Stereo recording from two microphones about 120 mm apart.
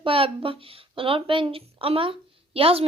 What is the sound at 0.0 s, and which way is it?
A woman's voice, 50° right (ahead or behind).